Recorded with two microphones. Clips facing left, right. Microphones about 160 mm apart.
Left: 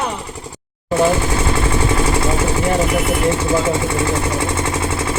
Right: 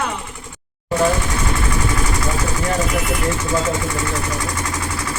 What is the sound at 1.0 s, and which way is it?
Vehicle, 30° left (ahead or behind).